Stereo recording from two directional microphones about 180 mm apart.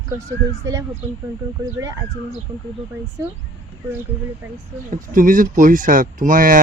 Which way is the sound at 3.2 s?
15° right (ahead or behind).